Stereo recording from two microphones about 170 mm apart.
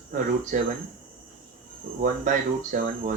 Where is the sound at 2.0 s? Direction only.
50° right (ahead or behind).